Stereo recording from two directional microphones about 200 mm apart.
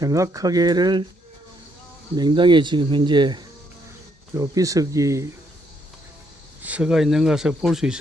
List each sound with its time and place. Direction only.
0.0 s speech: 15° right (ahead or behind)
2.1 s speech: 20° right (ahead or behind)
6.6 s speech: 5° right (ahead or behind)